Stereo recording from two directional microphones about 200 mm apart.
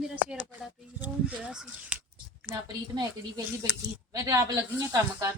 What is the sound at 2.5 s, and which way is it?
A woman's voice, 20° right (ahead or behind).